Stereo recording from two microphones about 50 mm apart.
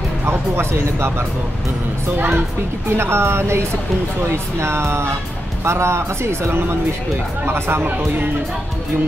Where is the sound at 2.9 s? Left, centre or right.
Right.